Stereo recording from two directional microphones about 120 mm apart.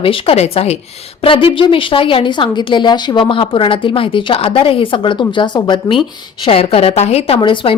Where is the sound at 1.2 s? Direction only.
45° left (ahead or behind).